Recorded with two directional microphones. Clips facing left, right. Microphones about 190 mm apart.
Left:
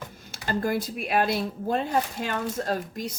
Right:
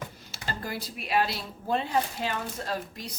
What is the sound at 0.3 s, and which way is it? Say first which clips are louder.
Speech: left 10 dB; 50° left (ahead or behind).